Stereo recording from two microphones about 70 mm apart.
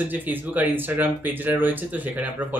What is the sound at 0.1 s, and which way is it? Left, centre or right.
Speech, right.